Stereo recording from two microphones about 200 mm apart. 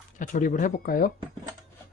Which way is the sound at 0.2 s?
40° left (ahead or behind).